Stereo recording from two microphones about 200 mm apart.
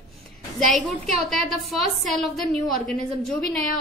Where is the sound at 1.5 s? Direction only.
Centre (ahead or behind).